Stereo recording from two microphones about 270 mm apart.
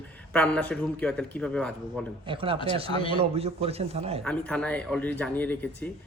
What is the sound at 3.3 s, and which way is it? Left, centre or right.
Speech, right.